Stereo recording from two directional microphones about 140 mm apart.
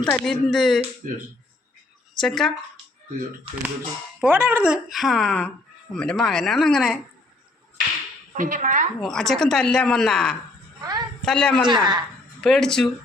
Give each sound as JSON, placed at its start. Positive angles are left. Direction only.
{"t": 0.0, "sound": "a woman's voice", "side_deg": 5}
{"t": 1.0, "sound": "speech", "side_deg": -65}
{"t": 2.1, "sound": "a woman's voice", "side_deg": 0}
{"t": 4.2, "sound": "a woman's voice", "side_deg": -15}
{"t": 8.4, "sound": "a woman's voice", "side_deg": -70}
{"t": 9.0, "sound": "a woman's voice", "side_deg": 5}
{"t": 10.8, "sound": "a sound", "side_deg": -30}
{"t": 11.3, "sound": "speech", "side_deg": 5}
{"t": 11.6, "sound": "a woman's voice", "side_deg": -30}
{"t": 12.4, "sound": "a woman's voice", "side_deg": 5}